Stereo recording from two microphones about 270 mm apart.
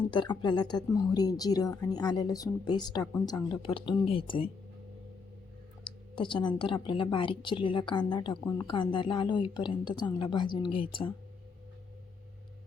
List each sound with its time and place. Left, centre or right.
0.0 s speech: centre
5.8 s speech: centre